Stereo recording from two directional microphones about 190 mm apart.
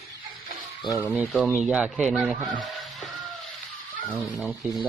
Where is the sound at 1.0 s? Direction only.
5° right (ahead or behind).